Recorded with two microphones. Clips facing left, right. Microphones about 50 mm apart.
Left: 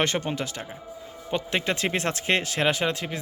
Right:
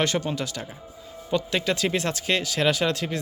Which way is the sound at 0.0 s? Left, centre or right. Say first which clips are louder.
Right 1 dB; left.